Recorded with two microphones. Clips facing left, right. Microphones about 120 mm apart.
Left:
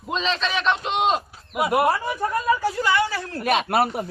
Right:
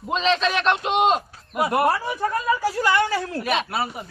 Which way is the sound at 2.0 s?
Centre (ahead or behind).